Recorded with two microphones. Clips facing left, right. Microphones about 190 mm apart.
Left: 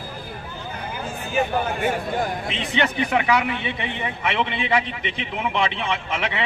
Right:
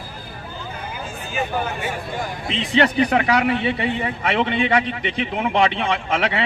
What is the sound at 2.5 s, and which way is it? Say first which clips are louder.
A man's voice: right 5 dB; 35° right (ahead or behind).